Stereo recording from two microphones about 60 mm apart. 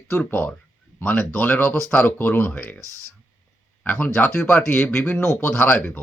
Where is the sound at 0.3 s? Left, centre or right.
Left.